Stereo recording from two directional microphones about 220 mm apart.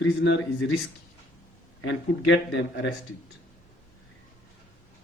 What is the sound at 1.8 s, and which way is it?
A man's voice, 60° left (ahead or behind).